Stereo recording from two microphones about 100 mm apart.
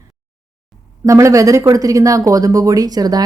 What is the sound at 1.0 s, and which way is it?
Speech, 30° right (ahead or behind).